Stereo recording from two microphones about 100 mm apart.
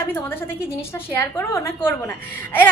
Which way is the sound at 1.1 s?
25° left (ahead or behind).